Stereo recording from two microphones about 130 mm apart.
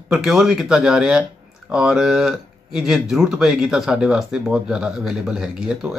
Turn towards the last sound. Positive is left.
turn(degrees=-5)  # may be behind; listen again after turning